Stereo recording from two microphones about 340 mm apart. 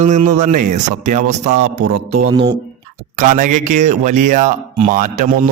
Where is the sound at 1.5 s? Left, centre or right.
Right.